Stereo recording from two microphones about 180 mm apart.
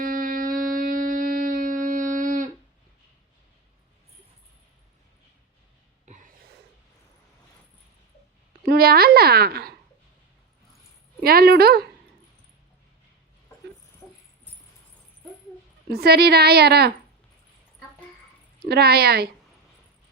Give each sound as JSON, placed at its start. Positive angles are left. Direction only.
{"t": 0.0, "sound": "music", "side_deg": -50}
{"t": 6.1, "sound": "gasp", "side_deg": -40}
{"t": 8.6, "sound": "speech", "side_deg": -60}
{"t": 11.2, "sound": "speech", "side_deg": -55}
{"t": 15.9, "sound": "speech", "side_deg": -60}
{"t": 18.6, "sound": "speech", "side_deg": -60}